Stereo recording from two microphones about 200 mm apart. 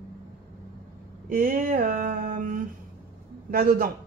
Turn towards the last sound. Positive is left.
turn(degrees=-45)  # may be behind; listen again after turning